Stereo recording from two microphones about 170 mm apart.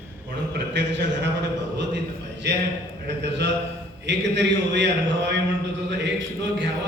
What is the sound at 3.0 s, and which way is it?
A man's voice, 90° right.